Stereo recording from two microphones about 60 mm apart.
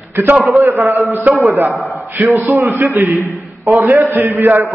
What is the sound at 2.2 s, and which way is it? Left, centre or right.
Speech, right.